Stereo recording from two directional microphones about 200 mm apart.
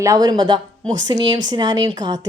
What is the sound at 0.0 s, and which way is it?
A woman's voice, 20° right (ahead or behind).